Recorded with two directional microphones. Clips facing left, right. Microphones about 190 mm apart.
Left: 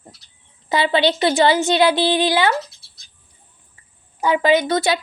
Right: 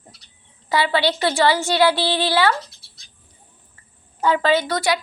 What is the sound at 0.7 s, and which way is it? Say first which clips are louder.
A woman's voice: left 2 dB; 20° left (ahead or behind).